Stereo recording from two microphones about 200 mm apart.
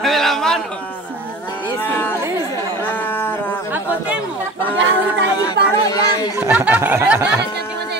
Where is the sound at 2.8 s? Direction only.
10° left (ahead or behind).